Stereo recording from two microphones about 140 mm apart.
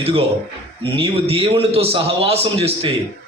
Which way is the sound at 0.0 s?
45° right (ahead or behind).